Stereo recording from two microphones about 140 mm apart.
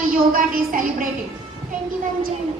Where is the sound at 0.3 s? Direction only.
80° right.